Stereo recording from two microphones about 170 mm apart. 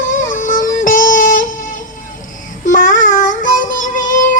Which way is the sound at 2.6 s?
50° left (ahead or behind).